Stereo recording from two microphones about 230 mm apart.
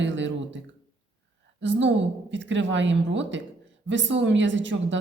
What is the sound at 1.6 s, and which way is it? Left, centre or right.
A man's voice, right.